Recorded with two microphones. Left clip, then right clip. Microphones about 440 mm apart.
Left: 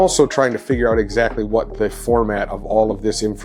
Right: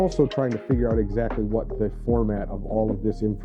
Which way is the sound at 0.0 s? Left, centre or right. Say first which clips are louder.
Left 8 dB; centre.